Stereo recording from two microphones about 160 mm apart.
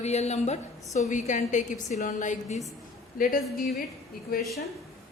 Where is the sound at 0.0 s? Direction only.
45° left (ahead or behind).